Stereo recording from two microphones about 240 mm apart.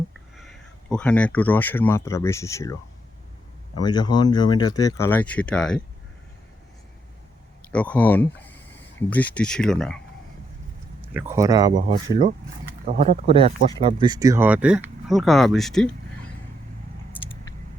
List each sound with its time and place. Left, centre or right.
0.3 s speech: centre
3.8 s speech: centre
7.7 s speech: centre
11.0 s speech: centre
12.8 s speech: right; by 15.9 s centre